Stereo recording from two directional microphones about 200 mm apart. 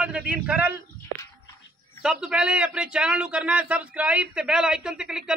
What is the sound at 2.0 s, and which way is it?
A man's voice, 5° right (ahead or behind).